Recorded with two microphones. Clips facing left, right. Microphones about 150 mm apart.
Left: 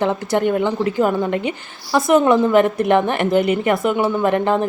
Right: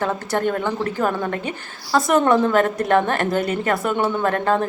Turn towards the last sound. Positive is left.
turn(degrees=15)  # may be behind; listen again after turning